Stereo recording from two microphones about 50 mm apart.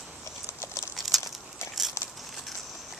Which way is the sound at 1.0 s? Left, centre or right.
Centre.